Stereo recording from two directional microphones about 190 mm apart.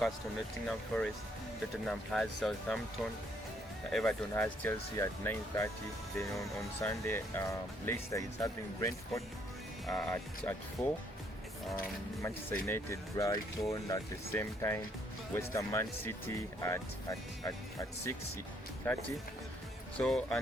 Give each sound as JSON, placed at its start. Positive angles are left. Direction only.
{"t": 0.7, "sound": "speech", "side_deg": 5}
{"t": 3.9, "sound": "speech", "side_deg": 5}
{"t": 12.2, "sound": "speech", "side_deg": 15}
{"t": 18.8, "sound": "speech", "side_deg": 10}